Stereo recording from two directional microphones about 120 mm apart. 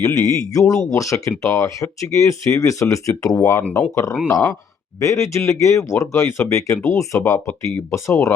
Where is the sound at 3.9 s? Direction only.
25° left (ahead or behind).